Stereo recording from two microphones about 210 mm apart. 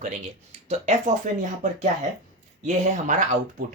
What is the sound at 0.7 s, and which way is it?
Speech, 35° right (ahead or behind).